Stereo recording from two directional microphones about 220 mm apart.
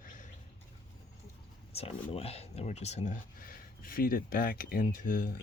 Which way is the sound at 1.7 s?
25° left (ahead or behind).